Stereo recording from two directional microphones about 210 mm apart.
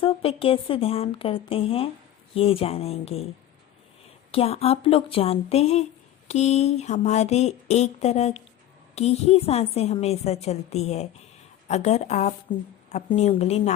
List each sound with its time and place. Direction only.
0.0 s a woman's voice: 25° left (ahead or behind)
4.3 s a woman's voice: 30° left (ahead or behind)